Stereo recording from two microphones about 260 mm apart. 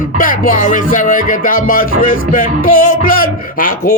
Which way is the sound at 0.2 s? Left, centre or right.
Left.